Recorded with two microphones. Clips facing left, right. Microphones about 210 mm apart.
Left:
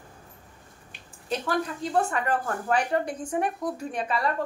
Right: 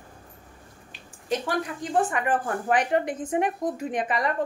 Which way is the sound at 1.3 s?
15° right (ahead or behind).